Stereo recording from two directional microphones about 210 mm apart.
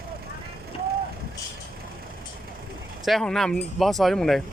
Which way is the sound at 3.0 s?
Centre (ahead or behind).